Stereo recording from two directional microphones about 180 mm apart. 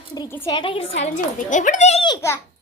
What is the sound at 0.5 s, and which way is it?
Speech, 30° left (ahead or behind).